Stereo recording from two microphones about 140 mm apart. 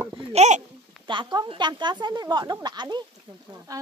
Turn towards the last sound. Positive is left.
turn(degrees=-30)  # may be behind; listen again after turning